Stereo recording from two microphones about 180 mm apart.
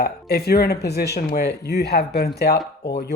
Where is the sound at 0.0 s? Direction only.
60° left (ahead or behind).